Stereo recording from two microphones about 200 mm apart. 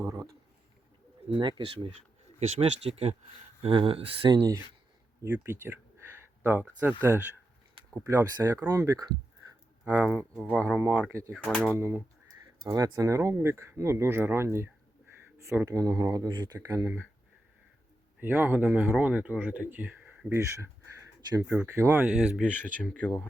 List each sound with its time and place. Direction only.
0.0 s a sound: 15° right (ahead or behind)
1.3 s speech: 25° right (ahead or behind)
10.3 s speech: 5° left (ahead or behind)
11.3 s speech: 5° left (ahead or behind)
11.8 s speech: 10° right (ahead or behind)
18.2 s speech: 10° right (ahead or behind)
22.4 s speech: 10° left (ahead or behind)